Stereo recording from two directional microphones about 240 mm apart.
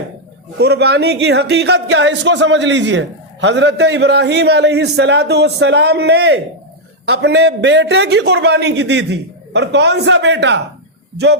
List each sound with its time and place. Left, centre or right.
0.6 s speech: right